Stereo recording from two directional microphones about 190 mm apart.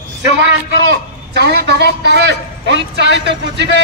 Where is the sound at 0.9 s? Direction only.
60° right (ahead or behind).